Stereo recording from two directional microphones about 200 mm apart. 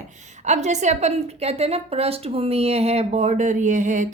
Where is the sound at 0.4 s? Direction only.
35° right (ahead or behind).